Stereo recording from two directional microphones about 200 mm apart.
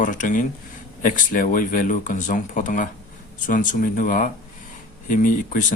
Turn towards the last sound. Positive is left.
turn(degrees=40)  # may be behind; listen again after turning